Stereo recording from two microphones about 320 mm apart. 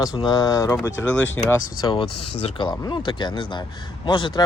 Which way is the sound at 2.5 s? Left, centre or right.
Centre.